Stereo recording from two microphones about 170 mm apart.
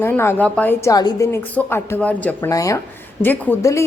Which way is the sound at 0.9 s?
20° left (ahead or behind).